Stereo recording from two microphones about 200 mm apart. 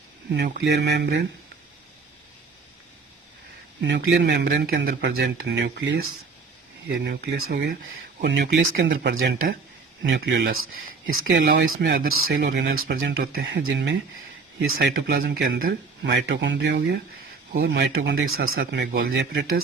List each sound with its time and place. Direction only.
0.3 s speech: 45° right (ahead or behind)
0.6 s speech: 60° right (ahead or behind)
3.8 s speech: 60° right (ahead or behind)
11.9 s speech: 50° right (ahead or behind)
14.8 s speech: 50° right (ahead or behind)
18.4 s speech: 75° right (ahead or behind); by 19.6 s 60° right (ahead or behind)